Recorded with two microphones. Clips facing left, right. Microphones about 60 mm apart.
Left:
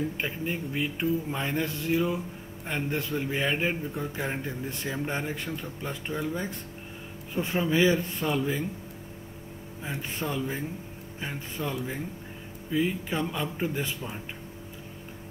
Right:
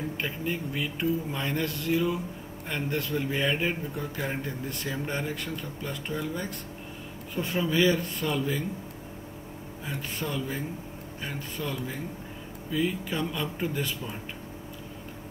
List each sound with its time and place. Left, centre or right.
0.2 s speech: centre
7.3 s speech: left
9.8 s speech: centre